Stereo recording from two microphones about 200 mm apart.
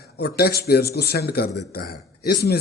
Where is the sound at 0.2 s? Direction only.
50° left (ahead or behind).